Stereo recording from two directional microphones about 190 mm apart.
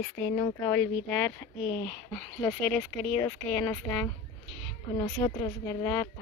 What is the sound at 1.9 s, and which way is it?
A woman's voice, 10° left (ahead or behind).